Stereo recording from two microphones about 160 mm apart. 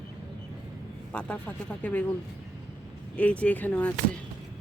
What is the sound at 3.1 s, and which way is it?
Speech, 10° left (ahead or behind).